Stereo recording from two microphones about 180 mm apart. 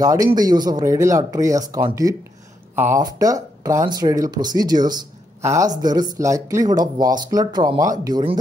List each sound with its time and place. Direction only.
0.0 s speech: 20° right (ahead or behind)